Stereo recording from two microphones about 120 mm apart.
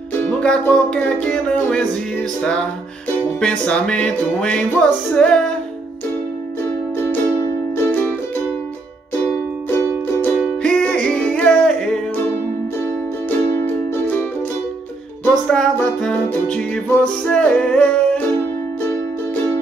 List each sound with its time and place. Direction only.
0.3 s music: 10° left (ahead or behind)
7.7 s music: 20° left (ahead or behind)
9.7 s music: 20° left (ahead or behind)
10.6 s music: 10° left (ahead or behind)
13.6 s music: 15° left (ahead or behind)
15.2 s music: 5° left (ahead or behind)
18.8 s music: 20° left (ahead or behind)